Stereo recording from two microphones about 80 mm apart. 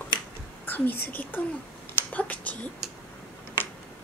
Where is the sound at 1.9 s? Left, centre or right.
Left.